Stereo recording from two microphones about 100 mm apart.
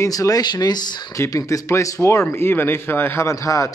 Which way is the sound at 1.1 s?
35° left (ahead or behind).